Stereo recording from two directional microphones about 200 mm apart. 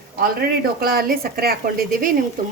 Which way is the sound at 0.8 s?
50° right (ahead or behind).